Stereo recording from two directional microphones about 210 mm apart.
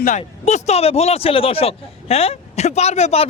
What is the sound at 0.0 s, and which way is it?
Speech, 35° left (ahead or behind).